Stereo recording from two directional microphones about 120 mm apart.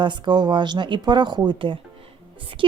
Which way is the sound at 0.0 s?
40° right (ahead or behind).